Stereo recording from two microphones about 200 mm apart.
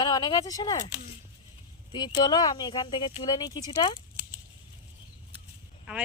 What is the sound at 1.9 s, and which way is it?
Speech, 20° left (ahead or behind).